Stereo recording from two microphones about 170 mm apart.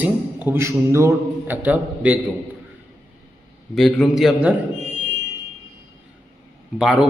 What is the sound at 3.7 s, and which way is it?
Speech, centre (ahead or behind).